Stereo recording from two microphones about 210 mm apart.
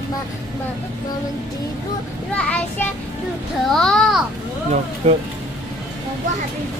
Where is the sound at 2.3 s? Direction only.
5° left (ahead or behind).